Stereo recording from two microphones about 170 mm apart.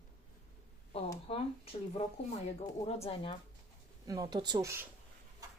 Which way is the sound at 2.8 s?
35° left (ahead or behind).